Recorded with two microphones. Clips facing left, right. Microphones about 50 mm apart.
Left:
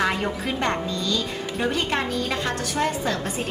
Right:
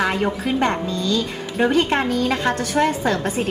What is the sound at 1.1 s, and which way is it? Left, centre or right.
A woman's voice, right.